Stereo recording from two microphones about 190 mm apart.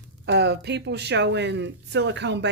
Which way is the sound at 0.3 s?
65° right (ahead or behind).